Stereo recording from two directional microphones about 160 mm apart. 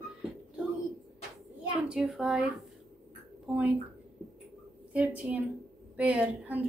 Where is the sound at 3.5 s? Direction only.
10° right (ahead or behind).